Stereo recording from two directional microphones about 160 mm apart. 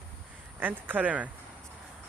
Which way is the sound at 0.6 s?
10° right (ahead or behind).